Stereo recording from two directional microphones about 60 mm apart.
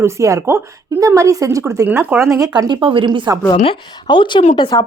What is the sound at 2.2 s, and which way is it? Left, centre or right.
Speech, right.